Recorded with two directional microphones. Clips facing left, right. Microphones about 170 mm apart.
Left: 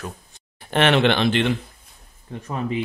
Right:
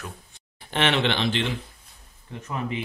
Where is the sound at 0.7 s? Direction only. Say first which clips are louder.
Left 6 dB; 55° left (ahead or behind).